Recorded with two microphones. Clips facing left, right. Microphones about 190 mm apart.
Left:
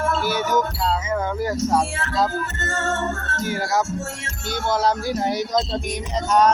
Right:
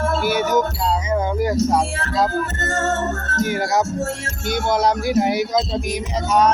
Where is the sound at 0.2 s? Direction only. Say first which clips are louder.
Right 3 dB; 10° right (ahead or behind).